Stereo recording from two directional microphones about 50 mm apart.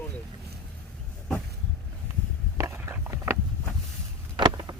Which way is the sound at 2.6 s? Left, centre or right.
Right.